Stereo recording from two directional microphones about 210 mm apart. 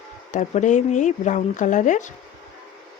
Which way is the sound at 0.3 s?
35° left (ahead or behind).